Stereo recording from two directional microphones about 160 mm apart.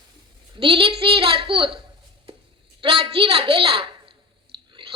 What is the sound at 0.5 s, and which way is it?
A woman's voice, 35° right (ahead or behind).